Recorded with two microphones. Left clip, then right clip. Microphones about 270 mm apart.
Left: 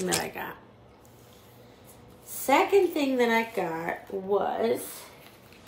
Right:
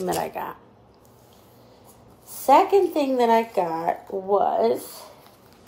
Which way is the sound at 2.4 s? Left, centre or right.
Centre.